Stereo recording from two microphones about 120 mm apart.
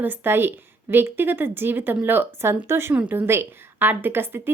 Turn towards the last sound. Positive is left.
turn(degrees=-20)  # may be behind; listen again after turning